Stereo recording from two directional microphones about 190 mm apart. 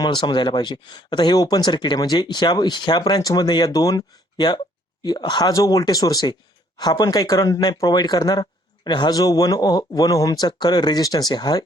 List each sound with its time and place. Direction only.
0.0 s speech: 25° left (ahead or behind)